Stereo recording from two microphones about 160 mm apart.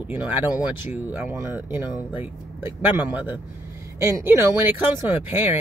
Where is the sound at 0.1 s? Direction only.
10° right (ahead or behind).